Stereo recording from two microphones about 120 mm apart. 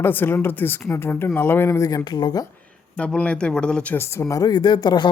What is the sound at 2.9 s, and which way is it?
Speech, 10° left (ahead or behind).